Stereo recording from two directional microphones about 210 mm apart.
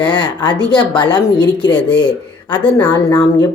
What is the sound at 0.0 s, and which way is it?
A woman's voice, 20° left (ahead or behind).